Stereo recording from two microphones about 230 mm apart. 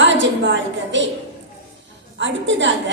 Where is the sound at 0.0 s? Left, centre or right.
Right.